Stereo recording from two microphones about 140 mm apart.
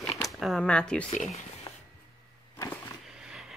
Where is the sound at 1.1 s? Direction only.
60° left (ahead or behind).